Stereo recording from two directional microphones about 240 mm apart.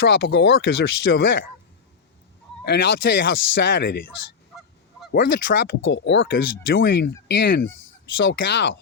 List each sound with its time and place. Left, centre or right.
0.0 s speech: left
2.6 s speech: left
5.1 s speech: left